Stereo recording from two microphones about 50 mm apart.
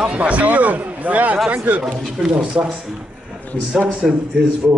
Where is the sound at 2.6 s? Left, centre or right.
Right.